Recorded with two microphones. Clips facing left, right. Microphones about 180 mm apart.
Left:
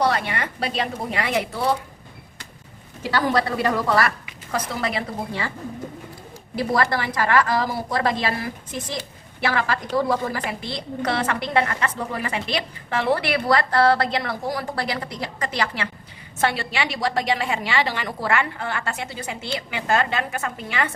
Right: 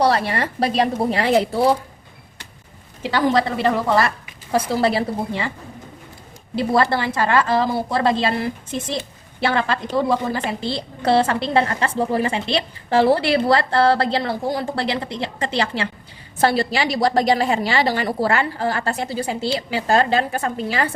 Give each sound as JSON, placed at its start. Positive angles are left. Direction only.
{"t": 0.0, "sound": "a woman's voice", "side_deg": -35}
{"t": 3.0, "sound": "a woman's voice", "side_deg": -20}
{"t": 6.6, "sound": "a woman's voice", "side_deg": -30}